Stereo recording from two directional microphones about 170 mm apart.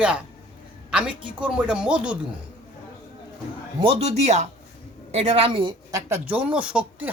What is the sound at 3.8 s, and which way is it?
A man's voice, 35° right (ahead or behind).